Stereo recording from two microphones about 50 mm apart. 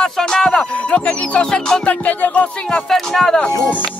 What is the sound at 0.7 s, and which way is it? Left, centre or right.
Music, left.